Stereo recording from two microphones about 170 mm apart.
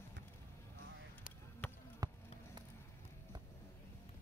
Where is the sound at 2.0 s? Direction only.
20° right (ahead or behind).